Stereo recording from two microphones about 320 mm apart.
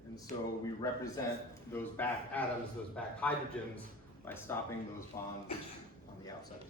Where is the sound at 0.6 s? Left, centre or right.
Centre.